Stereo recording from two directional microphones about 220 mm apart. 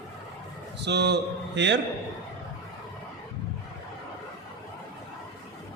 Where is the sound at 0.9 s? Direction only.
50° right (ahead or behind).